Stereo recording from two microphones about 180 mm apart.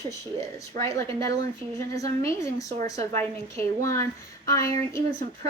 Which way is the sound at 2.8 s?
20° left (ahead or behind).